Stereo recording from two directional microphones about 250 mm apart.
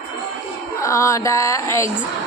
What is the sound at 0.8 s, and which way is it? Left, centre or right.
Music, centre.